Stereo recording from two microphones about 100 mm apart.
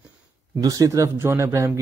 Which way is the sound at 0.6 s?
35° right (ahead or behind).